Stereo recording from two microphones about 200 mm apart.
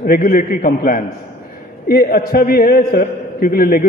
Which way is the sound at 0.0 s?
45° left (ahead or behind).